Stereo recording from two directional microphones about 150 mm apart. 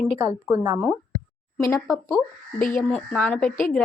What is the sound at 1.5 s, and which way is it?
Speech, 20° left (ahead or behind).